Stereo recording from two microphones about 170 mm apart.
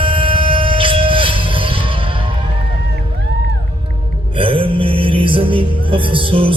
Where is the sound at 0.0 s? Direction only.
30° right (ahead or behind).